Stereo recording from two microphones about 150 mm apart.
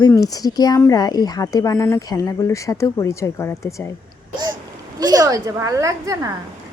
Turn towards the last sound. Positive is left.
turn(degrees=-20)  # may be behind; listen again after turning